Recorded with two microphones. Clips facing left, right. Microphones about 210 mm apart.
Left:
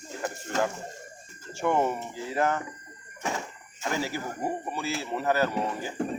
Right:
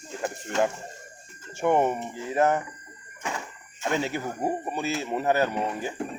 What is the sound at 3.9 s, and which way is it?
Speech, 20° right (ahead or behind).